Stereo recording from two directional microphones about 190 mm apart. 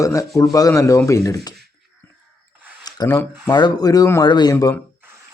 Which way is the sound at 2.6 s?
10° right (ahead or behind).